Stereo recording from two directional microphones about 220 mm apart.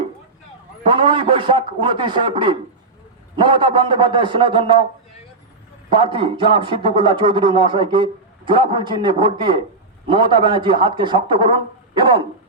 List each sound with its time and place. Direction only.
0.9 s speech: 20° right (ahead or behind)
5.9 s speech: 25° right (ahead or behind)